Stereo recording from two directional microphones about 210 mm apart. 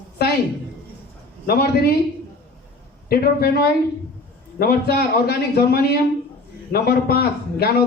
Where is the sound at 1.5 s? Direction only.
45° left (ahead or behind).